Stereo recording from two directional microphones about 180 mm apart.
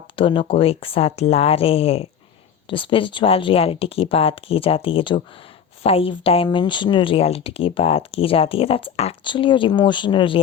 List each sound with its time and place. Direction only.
0.2 s speech: 30° left (ahead or behind)